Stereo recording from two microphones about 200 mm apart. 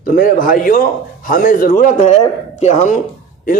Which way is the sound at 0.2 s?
45° left (ahead or behind).